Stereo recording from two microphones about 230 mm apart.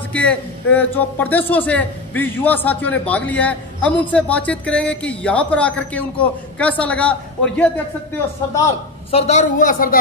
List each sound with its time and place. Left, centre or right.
0.1 s a man's voice: centre
9.1 s a woman's voice: left